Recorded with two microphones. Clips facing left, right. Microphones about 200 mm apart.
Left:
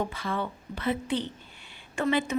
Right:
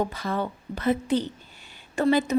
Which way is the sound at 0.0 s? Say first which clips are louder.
Right 3 dB; 40° right (ahead or behind).